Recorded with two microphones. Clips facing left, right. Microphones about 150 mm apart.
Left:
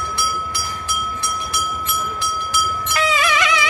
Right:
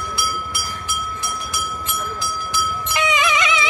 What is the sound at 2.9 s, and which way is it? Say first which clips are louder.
Music: even; 20° right (ahead or behind).